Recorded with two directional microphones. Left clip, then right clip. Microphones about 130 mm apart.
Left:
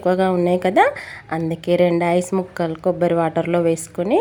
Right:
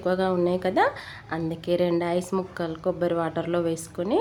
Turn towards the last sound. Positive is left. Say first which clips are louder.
# left 8 dB
turn(degrees=35)  # may be behind; listen again after turning